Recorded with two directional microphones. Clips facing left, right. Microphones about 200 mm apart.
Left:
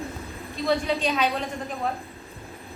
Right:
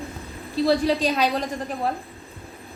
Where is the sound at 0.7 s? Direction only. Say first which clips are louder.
Right 3 dB; 35° right (ahead or behind).